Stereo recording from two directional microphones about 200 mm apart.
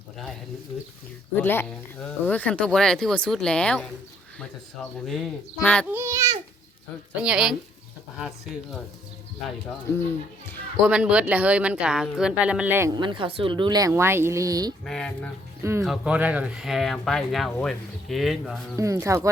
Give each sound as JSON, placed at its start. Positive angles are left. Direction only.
{"t": 1.4, "sound": "speech", "side_deg": 10}
{"t": 5.9, "sound": "speech", "side_deg": -15}
{"t": 10.8, "sound": "speech", "side_deg": -5}
{"t": 12.9, "sound": "speech", "side_deg": -25}
{"t": 14.8, "sound": "speech", "side_deg": 5}
{"t": 18.8, "sound": "speech", "side_deg": -15}